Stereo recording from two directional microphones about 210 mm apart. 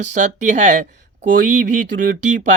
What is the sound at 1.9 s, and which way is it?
Speech, 40° right (ahead or behind).